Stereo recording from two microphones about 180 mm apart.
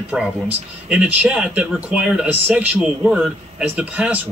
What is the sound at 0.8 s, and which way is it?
Speech, 5° right (ahead or behind).